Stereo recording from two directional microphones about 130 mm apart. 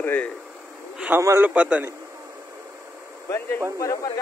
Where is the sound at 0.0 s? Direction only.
15° left (ahead or behind).